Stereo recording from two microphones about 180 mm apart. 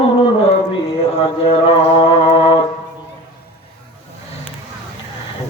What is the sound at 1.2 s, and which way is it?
Mantra, 30° left (ahead or behind).